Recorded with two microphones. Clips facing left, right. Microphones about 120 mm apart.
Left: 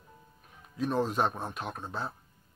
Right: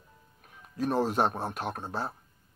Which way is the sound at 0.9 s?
10° right (ahead or behind).